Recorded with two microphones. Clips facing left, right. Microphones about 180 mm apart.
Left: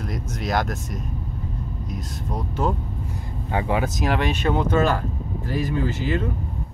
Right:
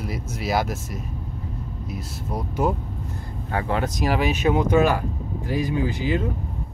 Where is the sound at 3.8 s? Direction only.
Centre (ahead or behind).